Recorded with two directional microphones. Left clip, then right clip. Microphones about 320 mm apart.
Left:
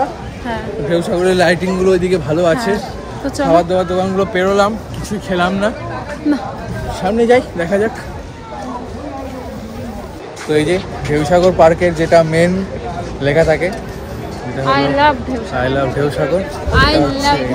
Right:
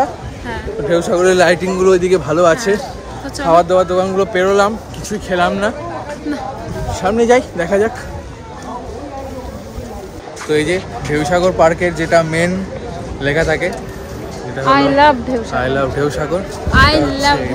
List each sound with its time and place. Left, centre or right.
0.8 s speech: centre
6.9 s speech: centre
10.5 s speech: centre
14.6 s speech: right
15.5 s speech: centre